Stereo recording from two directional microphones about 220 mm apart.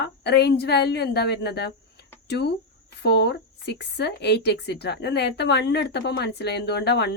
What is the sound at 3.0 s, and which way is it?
Speech, 50° left (ahead or behind).